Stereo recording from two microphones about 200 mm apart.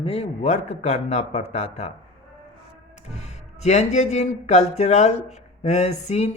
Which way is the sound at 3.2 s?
35° left (ahead or behind).